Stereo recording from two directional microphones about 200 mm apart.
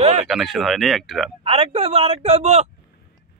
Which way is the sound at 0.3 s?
Centre (ahead or behind).